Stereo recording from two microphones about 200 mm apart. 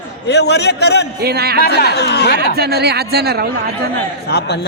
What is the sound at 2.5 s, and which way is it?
Speech, 55° right (ahead or behind).